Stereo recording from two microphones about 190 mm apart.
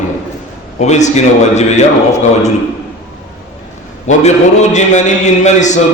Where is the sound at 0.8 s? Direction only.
35° left (ahead or behind).